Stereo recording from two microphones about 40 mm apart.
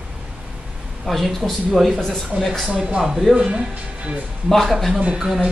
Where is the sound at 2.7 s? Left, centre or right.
Right.